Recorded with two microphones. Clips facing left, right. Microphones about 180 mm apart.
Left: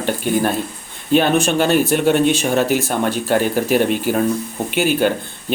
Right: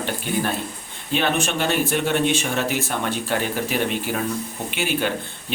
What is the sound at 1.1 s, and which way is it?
Speech, 40° left (ahead or behind).